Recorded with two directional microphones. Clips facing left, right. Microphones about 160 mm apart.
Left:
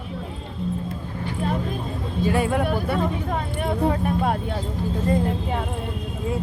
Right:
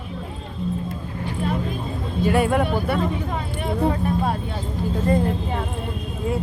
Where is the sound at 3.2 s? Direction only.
50° left (ahead or behind).